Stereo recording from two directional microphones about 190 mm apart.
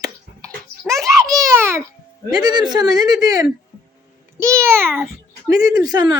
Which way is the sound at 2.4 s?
20° right (ahead or behind).